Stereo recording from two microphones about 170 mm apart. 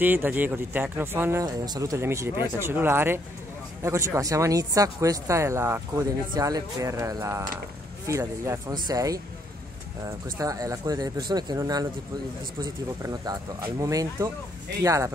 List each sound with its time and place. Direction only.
0.0 s speech: 10° right (ahead or behind)
13.0 s speech: 20° right (ahead or behind)